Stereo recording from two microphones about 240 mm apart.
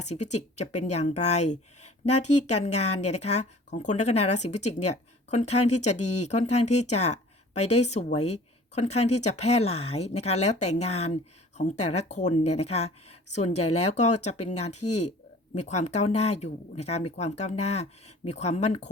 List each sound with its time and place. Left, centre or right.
0.0 s speech: left
14.8 s speech: left
15.5 s speech: left